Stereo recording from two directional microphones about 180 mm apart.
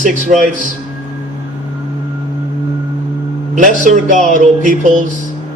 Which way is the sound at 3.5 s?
45° right (ahead or behind).